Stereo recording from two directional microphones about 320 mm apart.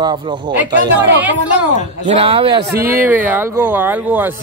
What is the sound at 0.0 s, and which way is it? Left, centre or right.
Speech, centre.